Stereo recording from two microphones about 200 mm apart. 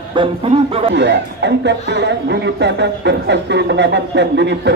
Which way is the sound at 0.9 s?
60° right (ahead or behind).